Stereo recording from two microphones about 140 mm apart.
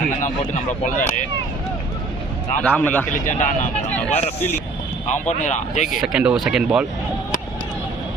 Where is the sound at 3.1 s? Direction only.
65° left (ahead or behind).